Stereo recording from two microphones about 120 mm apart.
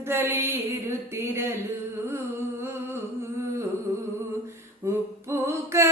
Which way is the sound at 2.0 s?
20° right (ahead or behind).